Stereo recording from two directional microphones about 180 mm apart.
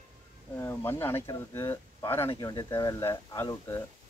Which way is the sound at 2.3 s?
25° left (ahead or behind).